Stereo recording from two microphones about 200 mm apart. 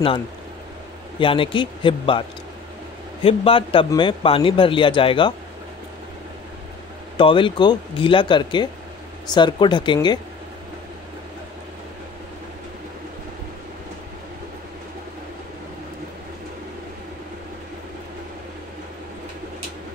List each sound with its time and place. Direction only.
1.2 s speech: 25° left (ahead or behind)
7.2 s speech: 25° left (ahead or behind)